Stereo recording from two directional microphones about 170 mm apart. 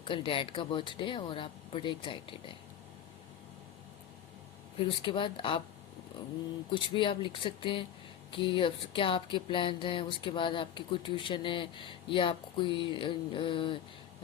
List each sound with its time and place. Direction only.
0.0 s speech: 30° left (ahead or behind)
4.8 s speech: 30° left (ahead or behind)
6.7 s speech: 30° left (ahead or behind)